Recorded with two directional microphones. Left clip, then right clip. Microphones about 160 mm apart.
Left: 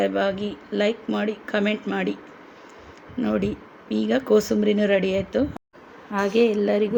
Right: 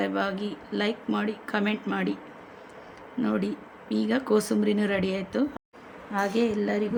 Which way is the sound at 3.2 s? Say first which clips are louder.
Left 4 dB; centre (ahead or behind).